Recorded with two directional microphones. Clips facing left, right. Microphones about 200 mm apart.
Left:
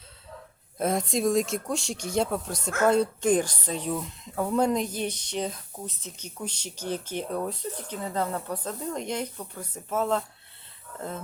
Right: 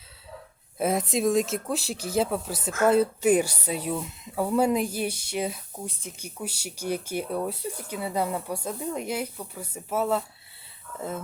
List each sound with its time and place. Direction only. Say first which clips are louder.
0.8 s speech: right 1 dB; 5° right (ahead or behind)